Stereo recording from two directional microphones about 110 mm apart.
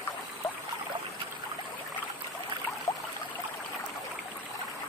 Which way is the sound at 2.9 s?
30° left (ahead or behind).